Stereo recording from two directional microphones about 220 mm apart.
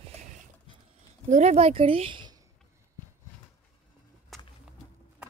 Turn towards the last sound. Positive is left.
turn(degrees=0)  # may be behind; listen again after turning